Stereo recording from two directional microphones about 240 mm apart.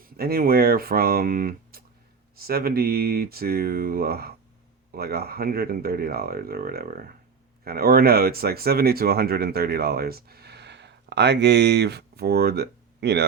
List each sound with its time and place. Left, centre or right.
0.0 s speech: right